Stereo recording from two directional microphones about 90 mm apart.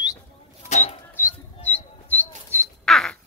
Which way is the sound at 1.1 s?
20° left (ahead or behind).